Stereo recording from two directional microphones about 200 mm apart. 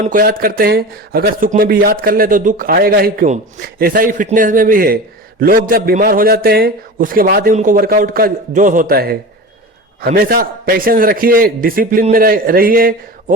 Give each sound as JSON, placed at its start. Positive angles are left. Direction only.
{"t": 0.0, "sound": "a man's voice", "side_deg": -45}